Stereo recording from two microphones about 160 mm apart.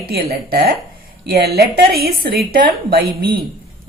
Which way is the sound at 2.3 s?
70° right (ahead or behind).